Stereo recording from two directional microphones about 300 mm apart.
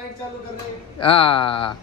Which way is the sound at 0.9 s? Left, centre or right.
Centre.